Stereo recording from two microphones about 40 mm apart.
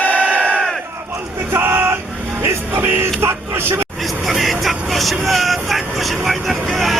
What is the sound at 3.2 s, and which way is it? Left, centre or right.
Vehicle, right.